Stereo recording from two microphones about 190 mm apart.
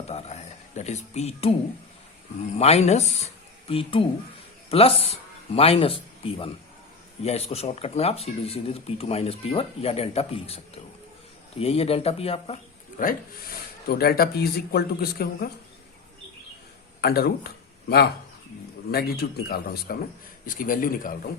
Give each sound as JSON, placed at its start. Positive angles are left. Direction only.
{"t": 0.1, "sound": "a sound", "side_deg": 35}
{"t": 2.6, "sound": "speech", "side_deg": 35}
{"t": 13.0, "sound": "speech", "side_deg": 50}
{"t": 17.0, "sound": "speech", "side_deg": 55}